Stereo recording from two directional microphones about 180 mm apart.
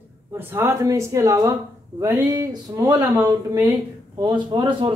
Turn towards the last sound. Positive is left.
turn(degrees=-25)  # may be behind; listen again after turning